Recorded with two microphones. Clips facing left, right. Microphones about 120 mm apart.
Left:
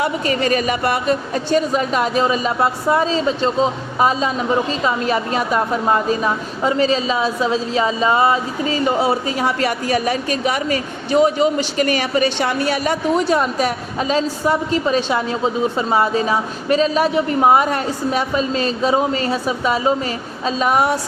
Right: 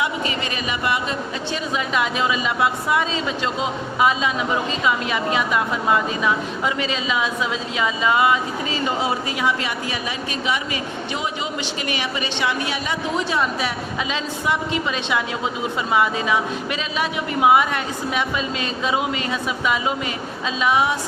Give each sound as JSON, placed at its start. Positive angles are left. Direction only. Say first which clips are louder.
{"t": 0.0, "sound": "a woman's voice", "louder": "left 5 dB", "side_deg": 45}